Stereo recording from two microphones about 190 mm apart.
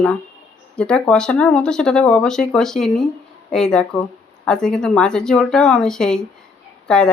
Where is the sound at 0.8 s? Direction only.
5° left (ahead or behind).